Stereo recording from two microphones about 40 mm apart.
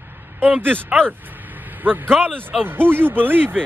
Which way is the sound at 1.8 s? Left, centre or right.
Right.